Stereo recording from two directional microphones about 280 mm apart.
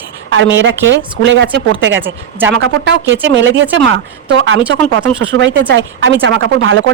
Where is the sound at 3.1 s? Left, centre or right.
Right.